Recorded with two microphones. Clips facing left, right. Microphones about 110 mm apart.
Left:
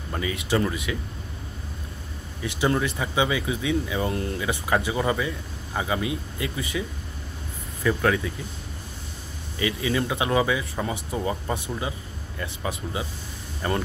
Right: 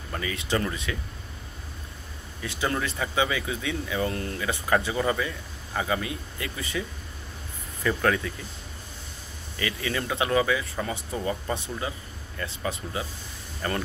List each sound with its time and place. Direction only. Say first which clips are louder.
0.1 s speech: left 3 dB; 15° left (ahead or behind)
2.4 s speech: left 4 dB; 20° left (ahead or behind)
7.8 s speech: left 2 dB; 5° left (ahead or behind)
9.6 s speech: left 5 dB; 15° left (ahead or behind)